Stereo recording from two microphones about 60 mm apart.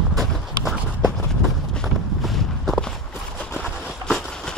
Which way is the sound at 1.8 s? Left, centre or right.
Centre.